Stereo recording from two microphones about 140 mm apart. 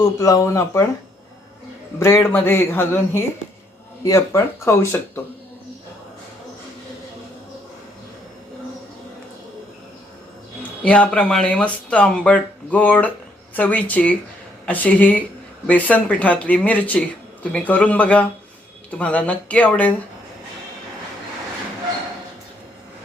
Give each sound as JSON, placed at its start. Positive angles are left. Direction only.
{"t": 0.2, "sound": "speech", "side_deg": 25}
{"t": 2.0, "sound": "speech", "side_deg": 20}
{"t": 10.8, "sound": "speech", "side_deg": 10}